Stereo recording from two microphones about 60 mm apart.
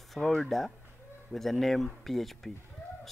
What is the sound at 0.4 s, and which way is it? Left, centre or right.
Speech, centre.